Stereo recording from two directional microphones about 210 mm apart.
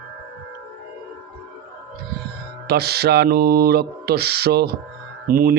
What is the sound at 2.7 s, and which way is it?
Speech, 50° right (ahead or behind).